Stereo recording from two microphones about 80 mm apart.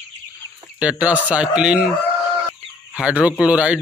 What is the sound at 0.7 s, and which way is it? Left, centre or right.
A man's voice, centre.